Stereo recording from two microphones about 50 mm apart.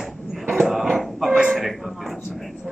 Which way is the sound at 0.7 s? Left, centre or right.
Centre.